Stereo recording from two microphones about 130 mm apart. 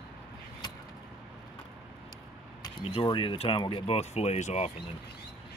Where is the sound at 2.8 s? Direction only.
40° left (ahead or behind); by 4.7 s 55° left (ahead or behind).